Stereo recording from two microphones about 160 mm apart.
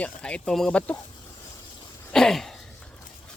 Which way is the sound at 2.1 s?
5° left (ahead or behind).